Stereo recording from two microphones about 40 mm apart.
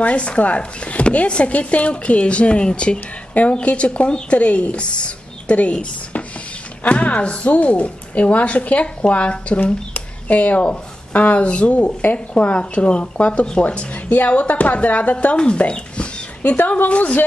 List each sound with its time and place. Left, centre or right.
0.0 s speech: left
9.9 s a sound: left
11.1 s speech: left
15.3 s a sound: left
16.5 s a woman's voice: left
16.9 s speech: left